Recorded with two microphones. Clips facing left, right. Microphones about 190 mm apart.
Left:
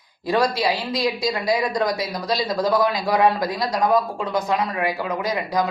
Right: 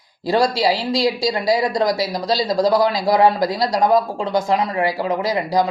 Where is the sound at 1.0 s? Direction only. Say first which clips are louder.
Right 4 dB; 25° right (ahead or behind).